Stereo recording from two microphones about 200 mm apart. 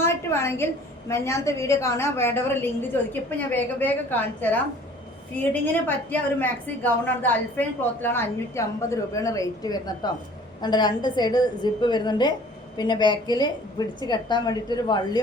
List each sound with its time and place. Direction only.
0.0 s a woman's voice: 10° left (ahead or behind)